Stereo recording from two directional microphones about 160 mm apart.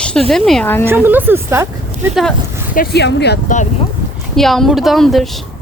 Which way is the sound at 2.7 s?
90° left.